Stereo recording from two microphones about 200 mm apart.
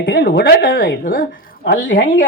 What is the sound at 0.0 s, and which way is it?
Speech, 65° left (ahead or behind).